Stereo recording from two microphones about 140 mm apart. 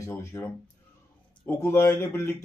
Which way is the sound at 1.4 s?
15° left (ahead or behind).